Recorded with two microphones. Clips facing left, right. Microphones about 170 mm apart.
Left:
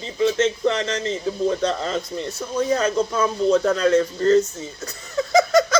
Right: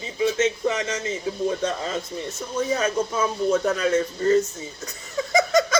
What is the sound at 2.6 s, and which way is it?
Speech, centre (ahead or behind).